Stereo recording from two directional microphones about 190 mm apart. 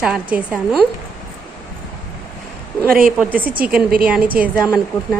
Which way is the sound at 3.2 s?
10° right (ahead or behind).